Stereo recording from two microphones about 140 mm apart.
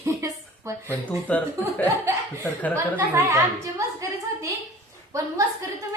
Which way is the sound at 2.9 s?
20° right (ahead or behind).